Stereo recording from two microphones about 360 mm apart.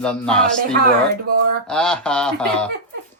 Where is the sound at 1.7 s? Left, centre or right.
Centre.